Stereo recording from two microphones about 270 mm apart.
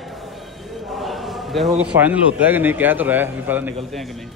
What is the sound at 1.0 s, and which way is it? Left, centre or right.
A man's voice, centre.